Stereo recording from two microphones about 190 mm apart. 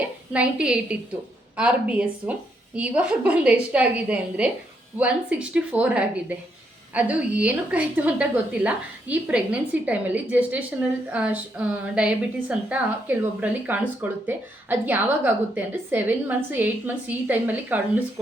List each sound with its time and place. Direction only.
0.3 s a woman's voice: 5° right (ahead or behind)